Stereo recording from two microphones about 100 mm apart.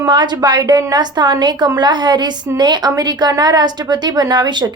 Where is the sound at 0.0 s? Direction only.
45° right (ahead or behind).